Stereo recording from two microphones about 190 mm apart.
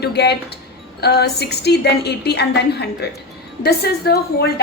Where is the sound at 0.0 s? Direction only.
60° left (ahead or behind).